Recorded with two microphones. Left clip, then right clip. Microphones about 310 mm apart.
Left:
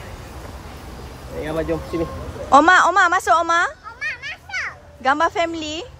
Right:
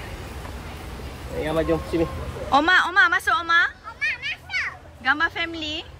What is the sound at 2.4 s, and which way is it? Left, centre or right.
Speech, left.